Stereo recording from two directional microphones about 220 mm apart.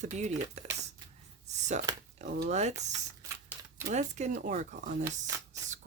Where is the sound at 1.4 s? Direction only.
30° right (ahead or behind).